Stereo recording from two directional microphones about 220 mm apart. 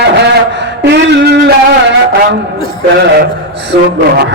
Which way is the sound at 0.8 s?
50° right (ahead or behind).